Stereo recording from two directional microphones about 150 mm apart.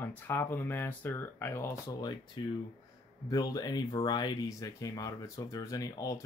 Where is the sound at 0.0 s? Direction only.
15° left (ahead or behind).